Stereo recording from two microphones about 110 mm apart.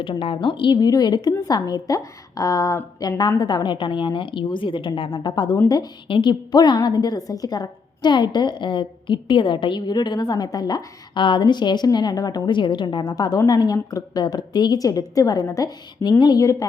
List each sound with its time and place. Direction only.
0.0 s a woman's voice: 55° left (ahead or behind)
5.2 s a woman's voice: 35° left (ahead or behind)
6.1 s a woman's voice: 50° left (ahead or behind); by 16.6 s 30° left (ahead or behind)